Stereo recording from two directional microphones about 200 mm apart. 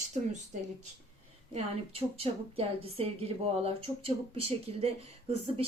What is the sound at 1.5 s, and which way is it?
A woman's voice, 30° right (ahead or behind).